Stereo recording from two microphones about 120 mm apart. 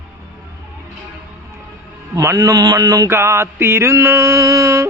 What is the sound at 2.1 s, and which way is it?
Speech, 25° right (ahead or behind).